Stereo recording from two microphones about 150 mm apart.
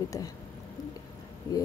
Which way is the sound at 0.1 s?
25° left (ahead or behind).